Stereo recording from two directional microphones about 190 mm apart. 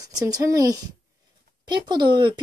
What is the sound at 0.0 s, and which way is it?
Speech, 20° right (ahead or behind).